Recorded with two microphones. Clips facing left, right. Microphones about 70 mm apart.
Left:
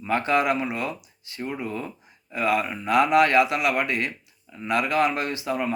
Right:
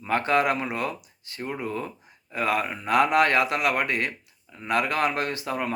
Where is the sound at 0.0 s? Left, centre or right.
Right.